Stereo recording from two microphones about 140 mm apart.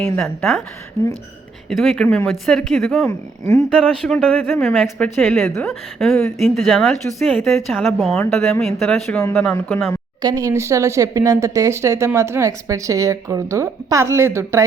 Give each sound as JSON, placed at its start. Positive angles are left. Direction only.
{"t": 0.0, "sound": "a woman's voice", "side_deg": 0}
{"t": 1.7, "sound": "a woman's voice", "side_deg": 0}
{"t": 3.0, "sound": "speech", "side_deg": 15}
{"t": 3.8, "sound": "a woman's voice", "side_deg": 0}
{"t": 10.2, "sound": "speech", "side_deg": -25}